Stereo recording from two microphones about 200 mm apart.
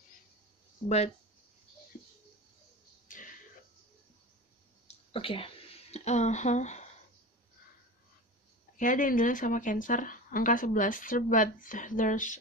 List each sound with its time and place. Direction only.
0.8 s speech: 35° left (ahead or behind)
3.1 s a sound: 40° left (ahead or behind)
5.1 s speech: 25° left (ahead or behind)
8.7 s speech: 40° left (ahead or behind)